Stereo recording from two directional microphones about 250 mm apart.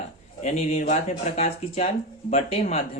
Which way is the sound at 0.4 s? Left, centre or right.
Left.